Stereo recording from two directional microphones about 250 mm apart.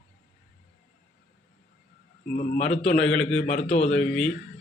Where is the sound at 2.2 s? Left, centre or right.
Left.